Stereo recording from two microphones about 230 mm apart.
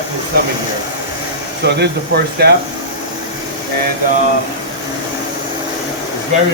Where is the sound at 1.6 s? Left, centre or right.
Right.